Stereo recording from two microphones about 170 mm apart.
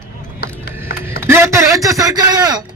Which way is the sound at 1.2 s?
15° right (ahead or behind).